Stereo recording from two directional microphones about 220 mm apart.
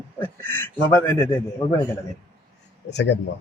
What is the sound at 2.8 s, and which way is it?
Speech, 50° left (ahead or behind).